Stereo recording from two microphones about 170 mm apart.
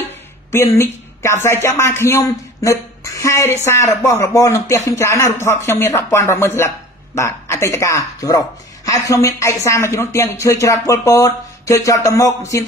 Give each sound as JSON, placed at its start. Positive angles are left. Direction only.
{"t": 0.5, "sound": "a man's voice", "side_deg": 15}